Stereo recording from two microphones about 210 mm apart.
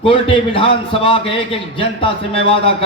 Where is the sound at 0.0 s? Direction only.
25° left (ahead or behind).